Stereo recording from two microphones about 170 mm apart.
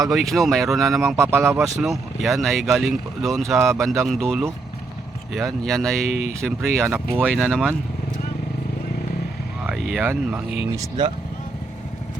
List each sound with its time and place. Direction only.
0.1 s speech: centre (ahead or behind)
1.1 s speech: 15° right (ahead or behind)
1.6 s speech: centre (ahead or behind)
7.1 s speech: 10° right (ahead or behind)
7.4 s speech: 5° left (ahead or behind)
9.6 s vehicle: centre (ahead or behind)
10.1 s speech: 10° right (ahead or behind)
10.8 s speech: 25° right (ahead or behind)